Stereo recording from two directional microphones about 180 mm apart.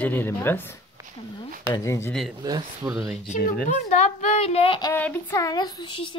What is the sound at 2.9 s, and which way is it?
Speech, centre (ahead or behind).